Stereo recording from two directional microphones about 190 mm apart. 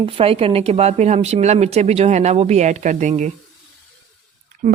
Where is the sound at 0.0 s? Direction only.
30° right (ahead or behind).